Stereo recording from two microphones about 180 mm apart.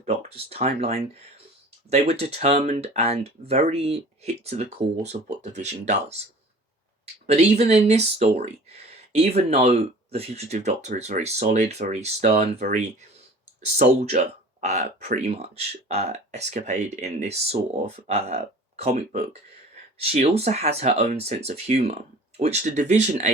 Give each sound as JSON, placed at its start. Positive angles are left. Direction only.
{"t": 0.0, "sound": "speech", "side_deg": -35}
{"t": 13.7, "sound": "speech", "side_deg": -40}